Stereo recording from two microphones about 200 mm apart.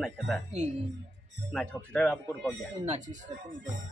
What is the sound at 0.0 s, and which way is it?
Speech, centre (ahead or behind).